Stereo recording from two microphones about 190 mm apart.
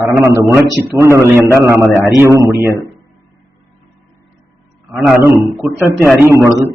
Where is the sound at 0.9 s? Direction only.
15° right (ahead or behind).